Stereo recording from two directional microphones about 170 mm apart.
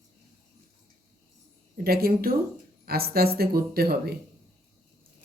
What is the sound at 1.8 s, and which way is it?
Speech, 65° right (ahead or behind).